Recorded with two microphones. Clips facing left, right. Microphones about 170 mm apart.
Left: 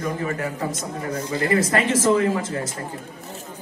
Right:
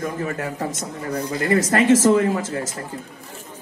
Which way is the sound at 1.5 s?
45° right (ahead or behind).